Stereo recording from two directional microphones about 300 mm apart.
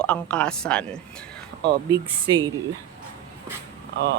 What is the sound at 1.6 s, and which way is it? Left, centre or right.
Speech, centre.